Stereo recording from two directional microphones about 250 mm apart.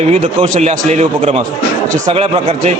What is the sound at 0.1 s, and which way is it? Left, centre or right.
A man's voice, right.